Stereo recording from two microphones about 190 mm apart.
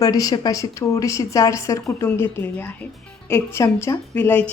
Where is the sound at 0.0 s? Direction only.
20° left (ahead or behind).